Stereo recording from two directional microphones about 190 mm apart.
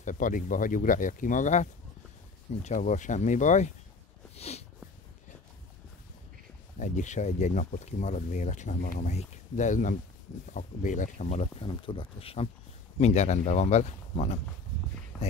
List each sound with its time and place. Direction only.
0.0 s speech: 40° left (ahead or behind)
4.4 s a sound: 35° left (ahead or behind)
6.8 s speech: 40° left (ahead or behind)